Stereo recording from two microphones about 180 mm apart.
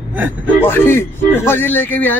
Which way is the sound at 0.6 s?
10° left (ahead or behind).